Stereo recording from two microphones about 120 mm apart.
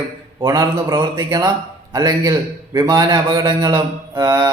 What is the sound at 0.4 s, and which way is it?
A man's voice, 35° right (ahead or behind).